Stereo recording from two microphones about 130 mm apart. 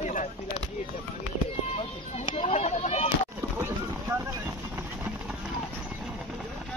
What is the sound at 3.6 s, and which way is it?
Boat, 15° right (ahead or behind).